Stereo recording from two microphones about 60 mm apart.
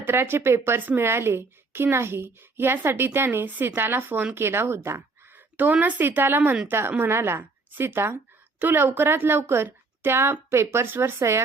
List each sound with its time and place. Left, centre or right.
0.0 s a child's voice: right
11.2 s speech: right